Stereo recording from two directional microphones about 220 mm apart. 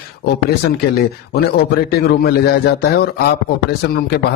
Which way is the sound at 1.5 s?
45° left (ahead or behind).